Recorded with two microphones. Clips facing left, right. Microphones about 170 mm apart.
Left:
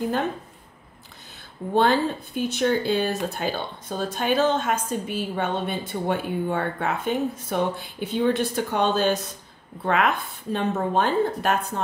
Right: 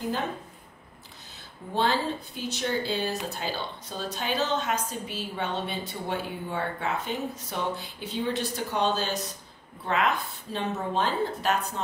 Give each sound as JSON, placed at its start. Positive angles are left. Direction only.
{"t": 1.7, "sound": "a woman's voice", "side_deg": 55}